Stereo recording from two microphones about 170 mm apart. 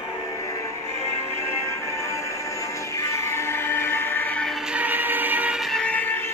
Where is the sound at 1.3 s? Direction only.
15° left (ahead or behind).